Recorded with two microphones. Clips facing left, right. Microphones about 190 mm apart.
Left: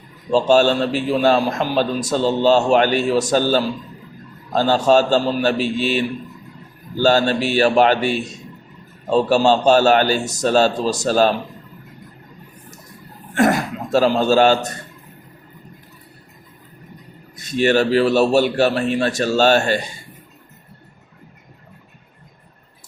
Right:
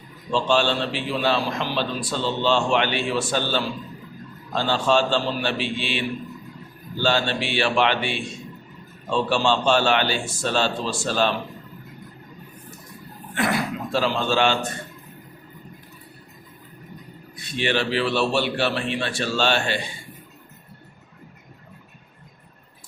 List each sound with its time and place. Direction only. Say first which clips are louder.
0.3 s a man's voice: left 7 dB; 40° left (ahead or behind)
13.3 s speech: left 7 dB; 45° left (ahead or behind)
17.3 s a man's voice: left 8 dB; 45° left (ahead or behind)